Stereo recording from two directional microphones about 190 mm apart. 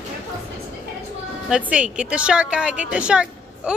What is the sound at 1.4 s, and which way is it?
A woman's voice, 5° right (ahead or behind).